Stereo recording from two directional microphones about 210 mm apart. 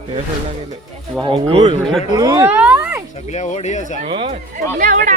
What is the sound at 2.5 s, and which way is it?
Speech, 5° right (ahead or behind).